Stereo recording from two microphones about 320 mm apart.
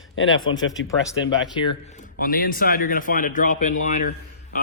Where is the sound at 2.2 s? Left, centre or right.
Left.